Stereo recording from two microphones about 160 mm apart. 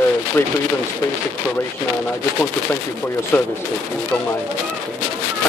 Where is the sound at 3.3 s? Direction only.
10° left (ahead or behind).